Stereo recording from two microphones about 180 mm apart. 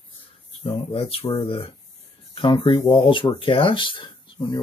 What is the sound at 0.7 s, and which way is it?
Speech, 30° left (ahead or behind).